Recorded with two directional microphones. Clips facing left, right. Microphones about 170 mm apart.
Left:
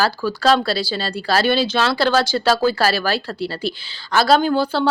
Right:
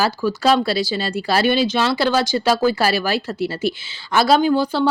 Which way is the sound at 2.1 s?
15° right (ahead or behind).